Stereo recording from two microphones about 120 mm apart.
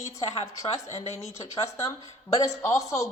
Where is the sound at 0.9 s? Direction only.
60° left (ahead or behind).